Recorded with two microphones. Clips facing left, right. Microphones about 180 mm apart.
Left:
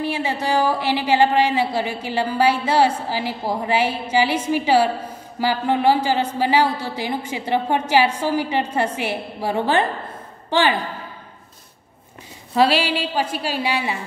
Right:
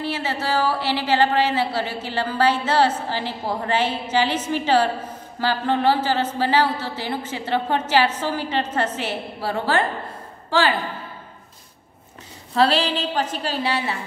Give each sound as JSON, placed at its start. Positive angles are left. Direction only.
{"t": 0.0, "sound": "a woman's voice", "side_deg": 15}
{"t": 12.5, "sound": "a woman's voice", "side_deg": 10}